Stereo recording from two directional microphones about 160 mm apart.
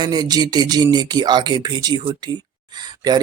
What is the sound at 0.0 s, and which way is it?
Speech, 25° right (ahead or behind).